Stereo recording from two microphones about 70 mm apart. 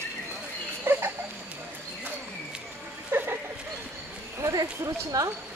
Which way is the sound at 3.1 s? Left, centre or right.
Right.